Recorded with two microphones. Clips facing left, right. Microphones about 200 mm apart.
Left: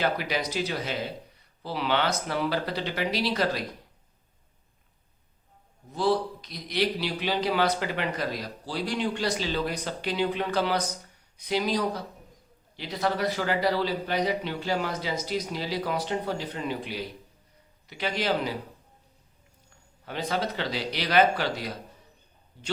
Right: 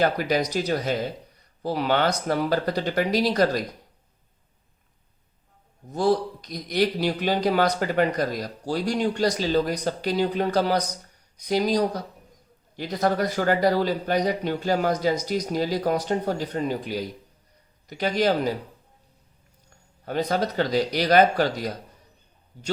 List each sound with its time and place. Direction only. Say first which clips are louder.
0.0 s speech: right 5 dB; 45° right (ahead or behind)
5.9 s speech: right 3 dB; 45° right (ahead or behind)
20.1 s speech: right 5 dB; 40° right (ahead or behind)